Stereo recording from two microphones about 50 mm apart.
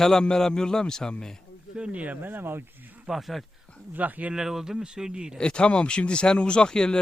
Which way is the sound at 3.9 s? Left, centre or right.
Right.